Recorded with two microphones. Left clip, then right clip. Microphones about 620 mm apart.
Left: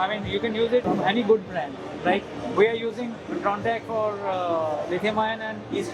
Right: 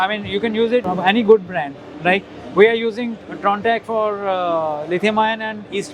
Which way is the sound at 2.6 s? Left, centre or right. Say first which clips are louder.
Right 8 dB; right.